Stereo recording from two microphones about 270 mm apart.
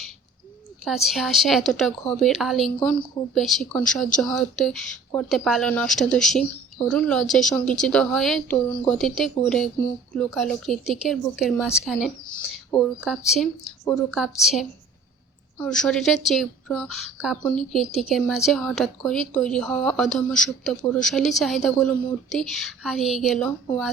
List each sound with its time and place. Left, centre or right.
0.9 s speech: centre